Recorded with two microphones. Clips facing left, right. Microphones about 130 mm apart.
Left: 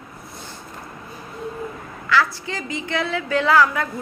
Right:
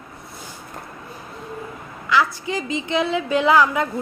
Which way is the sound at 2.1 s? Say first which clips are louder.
Right 1 dB; 15° right (ahead or behind).